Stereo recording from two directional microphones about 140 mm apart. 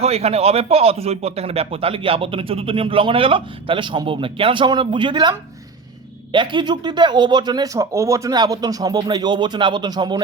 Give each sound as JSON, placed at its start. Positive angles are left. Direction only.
{"t": 0.0, "sound": "speech", "side_deg": -45}